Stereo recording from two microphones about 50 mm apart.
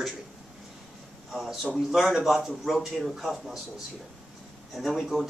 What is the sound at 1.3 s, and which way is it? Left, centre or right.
A man's voice, centre.